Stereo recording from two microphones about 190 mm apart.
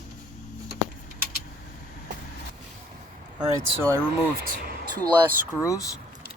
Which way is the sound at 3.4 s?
15° right (ahead or behind).